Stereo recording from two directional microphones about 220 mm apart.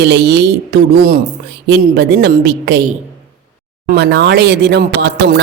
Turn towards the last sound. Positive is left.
turn(degrees=-50)  # may be behind; listen again after turning